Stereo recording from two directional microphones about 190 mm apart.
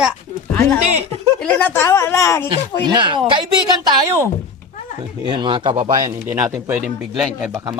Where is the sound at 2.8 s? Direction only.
25° right (ahead or behind).